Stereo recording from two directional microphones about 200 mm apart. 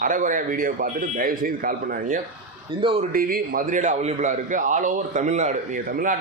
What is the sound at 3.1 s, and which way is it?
Speech, 45° right (ahead or behind).